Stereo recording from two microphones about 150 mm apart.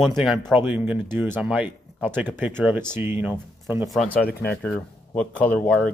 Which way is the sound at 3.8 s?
5° left (ahead or behind).